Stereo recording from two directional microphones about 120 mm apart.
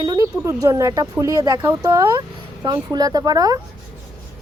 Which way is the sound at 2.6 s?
35° right (ahead or behind).